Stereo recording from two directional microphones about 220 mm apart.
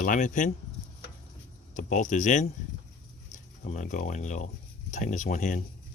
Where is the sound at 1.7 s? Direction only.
35° left (ahead or behind).